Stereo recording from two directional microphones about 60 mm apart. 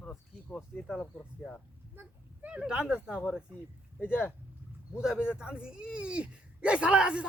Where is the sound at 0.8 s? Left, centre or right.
Centre.